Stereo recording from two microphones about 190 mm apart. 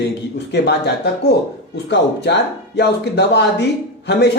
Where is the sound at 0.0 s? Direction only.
65° left (ahead or behind).